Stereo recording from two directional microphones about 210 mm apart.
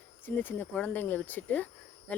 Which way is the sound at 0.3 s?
10° left (ahead or behind).